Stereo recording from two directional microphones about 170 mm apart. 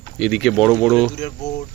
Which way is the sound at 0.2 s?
Centre (ahead or behind).